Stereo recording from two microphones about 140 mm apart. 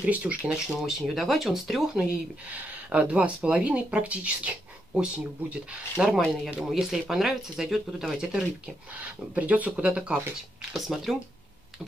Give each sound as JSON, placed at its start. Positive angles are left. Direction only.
{"t": 0.0, "sound": "speech", "side_deg": -10}